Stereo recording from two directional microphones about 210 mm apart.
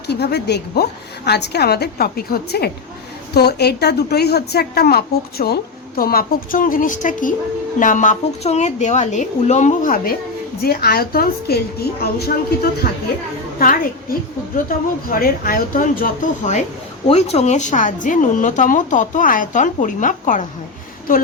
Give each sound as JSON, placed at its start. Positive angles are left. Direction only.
{"t": 0.1, "sound": "a woman's voice", "side_deg": 50}
{"t": 13.6, "sound": "a woman's voice", "side_deg": 40}